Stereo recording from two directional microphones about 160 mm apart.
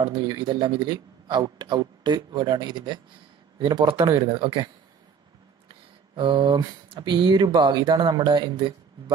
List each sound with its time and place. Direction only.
0.0 s speech: 25° right (ahead or behind)
6.1 s speech: 30° right (ahead or behind)